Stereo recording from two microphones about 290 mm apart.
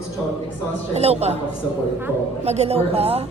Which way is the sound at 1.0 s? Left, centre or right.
Right.